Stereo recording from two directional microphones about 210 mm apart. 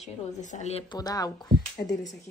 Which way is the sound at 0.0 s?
35° left (ahead or behind).